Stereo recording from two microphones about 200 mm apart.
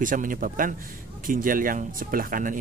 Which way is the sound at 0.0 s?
40° right (ahead or behind).